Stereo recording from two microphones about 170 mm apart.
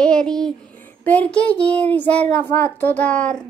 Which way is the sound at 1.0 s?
10° left (ahead or behind).